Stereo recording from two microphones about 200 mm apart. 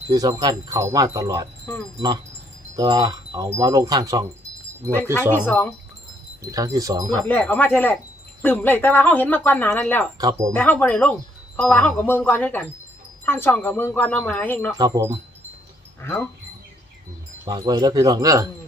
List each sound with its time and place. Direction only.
0.1 s speech: 20° right (ahead or behind)
1.7 s speech: 10° left (ahead or behind)
2.7 s wind chime: 20° right (ahead or behind)
5.5 s speech: 5° left (ahead or behind)
6.4 s speech: 20° right (ahead or behind)
7.3 s speech: 10° left (ahead or behind)
10.2 s speech: 20° right (ahead or behind)
10.5 s speech: 10° left (ahead or behind)
14.8 s speech: 20° right (ahead or behind)
16.0 s speech: 10° left (ahead or behind)
17.4 s speech: 20° right (ahead or behind)